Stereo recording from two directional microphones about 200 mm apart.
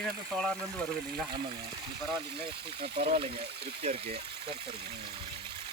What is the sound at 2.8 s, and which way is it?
Speech, 25° right (ahead or behind).